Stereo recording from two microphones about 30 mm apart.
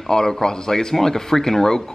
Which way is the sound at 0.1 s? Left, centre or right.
Left.